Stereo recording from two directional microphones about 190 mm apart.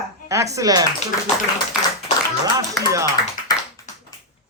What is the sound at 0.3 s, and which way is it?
Speech, 15° right (ahead or behind).